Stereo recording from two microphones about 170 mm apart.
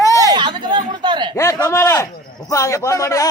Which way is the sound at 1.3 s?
15° left (ahead or behind).